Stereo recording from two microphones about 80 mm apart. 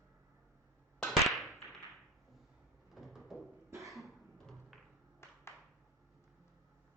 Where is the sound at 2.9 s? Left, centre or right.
Centre.